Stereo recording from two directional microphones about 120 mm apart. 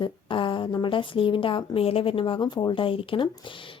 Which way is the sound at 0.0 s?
45° left (ahead or behind).